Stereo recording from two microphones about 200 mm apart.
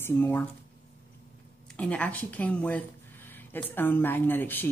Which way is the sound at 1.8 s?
5° left (ahead or behind).